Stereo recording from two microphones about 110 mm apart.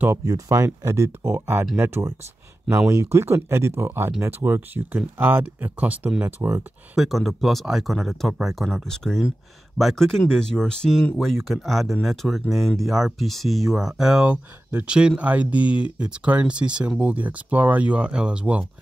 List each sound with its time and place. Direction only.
0.0 s speech: 25° right (ahead or behind)
7.0 s speech: centre (ahead or behind)